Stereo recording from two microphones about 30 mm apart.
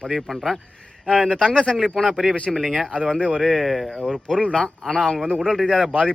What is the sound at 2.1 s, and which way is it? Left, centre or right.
Speech, centre.